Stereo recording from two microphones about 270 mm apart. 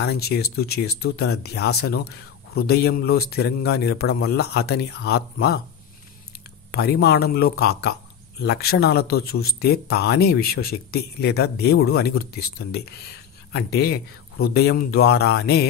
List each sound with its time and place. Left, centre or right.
0.0 s speech: left
6.7 s speech: left